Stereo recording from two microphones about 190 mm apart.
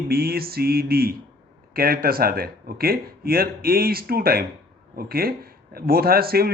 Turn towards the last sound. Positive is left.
turn(degrees=-55)  # may be behind; listen again after turning